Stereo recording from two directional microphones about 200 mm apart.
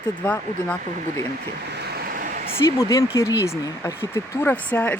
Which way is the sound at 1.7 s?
55° right (ahead or behind).